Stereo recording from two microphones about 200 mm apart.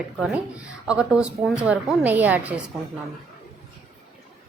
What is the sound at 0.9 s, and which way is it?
A child's voice, 5° right (ahead or behind).